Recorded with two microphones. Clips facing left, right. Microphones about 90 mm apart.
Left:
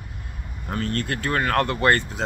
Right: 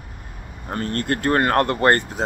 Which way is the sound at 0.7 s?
45° right (ahead or behind).